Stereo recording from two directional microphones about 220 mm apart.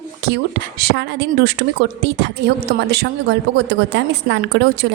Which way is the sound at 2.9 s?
50° right (ahead or behind).